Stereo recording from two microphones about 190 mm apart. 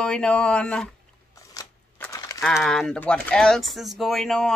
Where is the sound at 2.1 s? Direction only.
20° left (ahead or behind).